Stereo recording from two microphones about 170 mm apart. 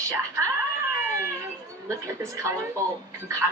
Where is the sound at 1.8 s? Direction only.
20° right (ahead or behind).